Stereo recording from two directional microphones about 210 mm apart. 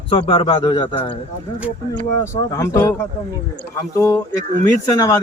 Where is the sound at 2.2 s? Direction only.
15° left (ahead or behind).